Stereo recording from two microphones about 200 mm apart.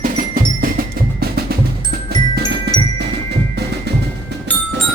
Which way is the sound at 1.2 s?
50° right (ahead or behind).